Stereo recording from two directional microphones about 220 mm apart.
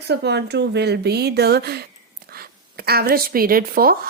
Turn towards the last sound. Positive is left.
turn(degrees=-40)  # may be behind; listen again after turning